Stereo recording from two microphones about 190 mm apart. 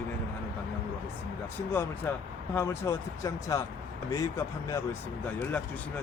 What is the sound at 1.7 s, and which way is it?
Speech, 10° left (ahead or behind).